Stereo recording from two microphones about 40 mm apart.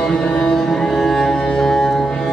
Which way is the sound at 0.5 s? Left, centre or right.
Centre.